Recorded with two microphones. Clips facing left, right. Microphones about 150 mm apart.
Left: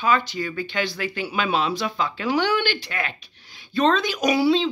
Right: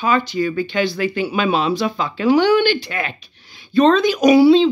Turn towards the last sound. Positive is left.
turn(degrees=-20)  # may be behind; listen again after turning